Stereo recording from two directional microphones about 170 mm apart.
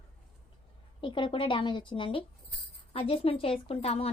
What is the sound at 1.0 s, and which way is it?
A woman's voice, 30° left (ahead or behind).